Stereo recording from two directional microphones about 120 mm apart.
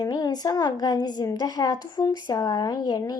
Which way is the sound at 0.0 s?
35° left (ahead or behind).